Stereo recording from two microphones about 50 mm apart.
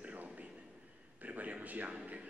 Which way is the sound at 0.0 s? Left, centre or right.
Right.